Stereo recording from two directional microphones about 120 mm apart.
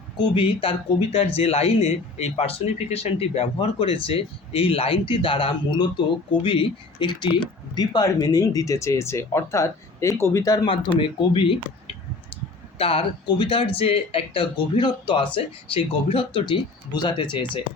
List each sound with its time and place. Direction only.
0.2 s speech: 45° left (ahead or behind); by 10.6 s 25° left (ahead or behind)
10.7 s speech: 45° left (ahead or behind)
12.8 s speech: 50° left (ahead or behind)